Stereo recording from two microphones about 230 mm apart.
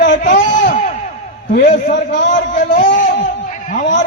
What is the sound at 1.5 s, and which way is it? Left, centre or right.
A man's voice, left.